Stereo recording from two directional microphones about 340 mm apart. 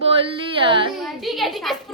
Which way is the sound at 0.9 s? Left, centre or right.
Centre.